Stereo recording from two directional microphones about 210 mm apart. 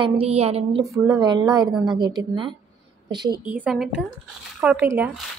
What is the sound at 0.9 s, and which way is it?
A woman's voice, 15° right (ahead or behind).